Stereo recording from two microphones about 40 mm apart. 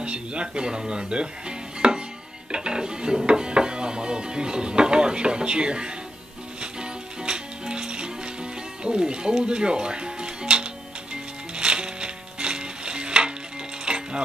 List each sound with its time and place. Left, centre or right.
0.0 s dishes: right
6.6 s music: right
8.8 s speech: right
11.5 s music: right